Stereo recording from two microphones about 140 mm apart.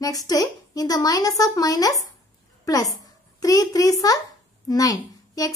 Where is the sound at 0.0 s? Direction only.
25° left (ahead or behind).